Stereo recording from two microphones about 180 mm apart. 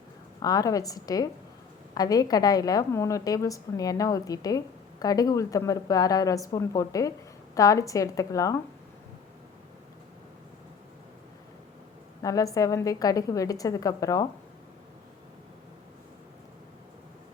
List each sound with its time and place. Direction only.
0.3 s a woman's voice: 20° left (ahead or behind)
12.2 s a woman's voice: 20° left (ahead or behind)